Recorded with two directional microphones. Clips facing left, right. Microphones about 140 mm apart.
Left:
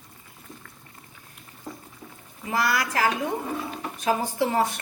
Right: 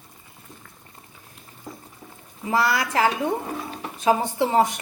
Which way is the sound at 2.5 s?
25° right (ahead or behind).